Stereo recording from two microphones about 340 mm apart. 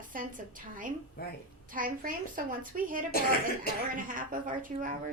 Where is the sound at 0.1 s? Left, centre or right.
Right.